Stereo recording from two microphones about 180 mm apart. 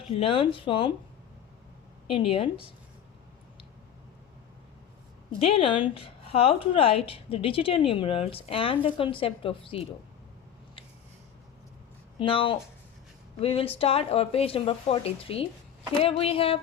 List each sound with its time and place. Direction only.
0.2 s speech: 30° left (ahead or behind)
2.0 s speech: 30° left (ahead or behind)
5.4 s speech: 30° left (ahead or behind)
12.2 s speech: 30° left (ahead or behind)